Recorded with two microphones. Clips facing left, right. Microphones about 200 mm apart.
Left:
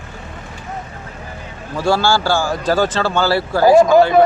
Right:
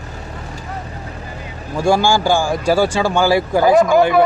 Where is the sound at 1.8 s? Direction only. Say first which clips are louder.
Right 1 dB; 15° right (ahead or behind).